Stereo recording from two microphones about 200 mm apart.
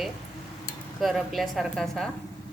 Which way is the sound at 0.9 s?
Centre (ahead or behind).